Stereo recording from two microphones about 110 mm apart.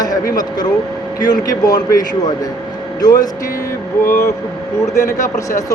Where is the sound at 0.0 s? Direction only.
35° left (ahead or behind).